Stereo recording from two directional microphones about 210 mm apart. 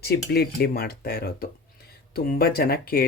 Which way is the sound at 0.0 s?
50° left (ahead or behind).